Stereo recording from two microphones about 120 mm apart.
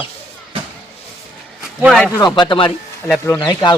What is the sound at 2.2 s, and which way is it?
Speech, 40° left (ahead or behind).